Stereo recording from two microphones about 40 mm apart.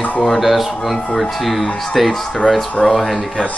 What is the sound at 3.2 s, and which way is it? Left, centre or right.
Speech, left.